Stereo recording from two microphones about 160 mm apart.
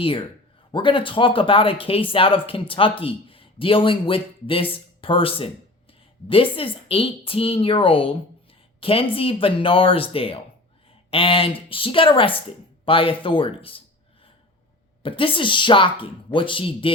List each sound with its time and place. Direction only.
0.0 s speech: 35° left (ahead or behind)
15.0 s speech: 35° left (ahead or behind)